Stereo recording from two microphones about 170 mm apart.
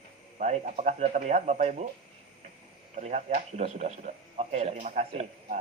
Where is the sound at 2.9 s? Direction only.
40° right (ahead or behind).